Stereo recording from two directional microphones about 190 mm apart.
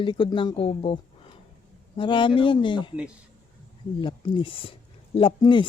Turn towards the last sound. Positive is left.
turn(degrees=25)  # may be behind; listen again after turning